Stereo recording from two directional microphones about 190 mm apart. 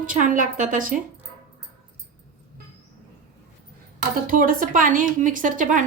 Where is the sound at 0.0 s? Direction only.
45° right (ahead or behind).